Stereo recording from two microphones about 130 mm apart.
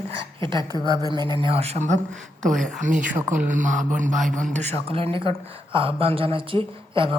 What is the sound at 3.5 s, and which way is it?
Speech, 75° right (ahead or behind).